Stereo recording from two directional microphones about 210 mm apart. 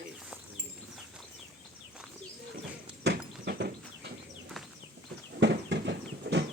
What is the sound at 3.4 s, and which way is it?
Horse, 50° right (ahead or behind).